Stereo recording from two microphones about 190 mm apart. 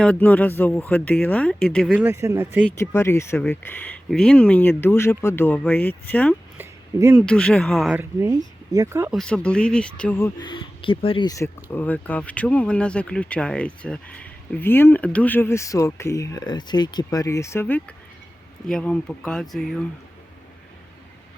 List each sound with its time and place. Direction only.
0.0 s speech: 10° left (ahead or behind); by 2.6 s 10° right (ahead or behind)
2.6 s speech: 10° left (ahead or behind)
6.6 s a sound: 10° right (ahead or behind)
7.2 s speech: 5° left (ahead or behind)
8.2 s speech: 20° right (ahead or behind)
9.1 s speech: 5° left (ahead or behind)